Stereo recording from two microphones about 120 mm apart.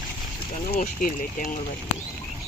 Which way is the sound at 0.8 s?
90° left.